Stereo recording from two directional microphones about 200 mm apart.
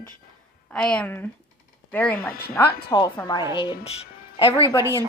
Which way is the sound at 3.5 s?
25° left (ahead or behind).